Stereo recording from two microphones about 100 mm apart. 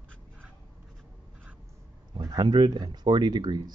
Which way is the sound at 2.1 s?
45° right (ahead or behind).